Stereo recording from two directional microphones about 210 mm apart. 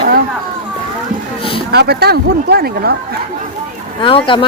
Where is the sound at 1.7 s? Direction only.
50° right (ahead or behind).